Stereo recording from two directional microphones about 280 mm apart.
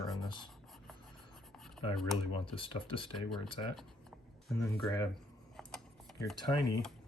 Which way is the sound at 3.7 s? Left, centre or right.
Centre.